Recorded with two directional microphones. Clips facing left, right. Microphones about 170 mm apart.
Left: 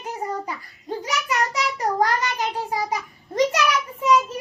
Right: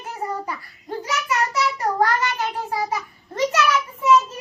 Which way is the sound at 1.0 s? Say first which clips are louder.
Right 1 dB; 15° left (ahead or behind).